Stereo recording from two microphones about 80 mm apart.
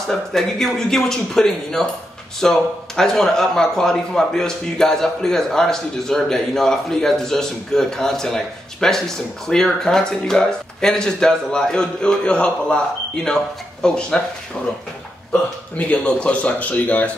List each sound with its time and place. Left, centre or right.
0.1 s a man's voice: centre
15.9 s a man's voice: centre